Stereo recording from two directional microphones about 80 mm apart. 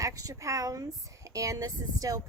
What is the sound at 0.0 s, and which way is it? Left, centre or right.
Speech, right.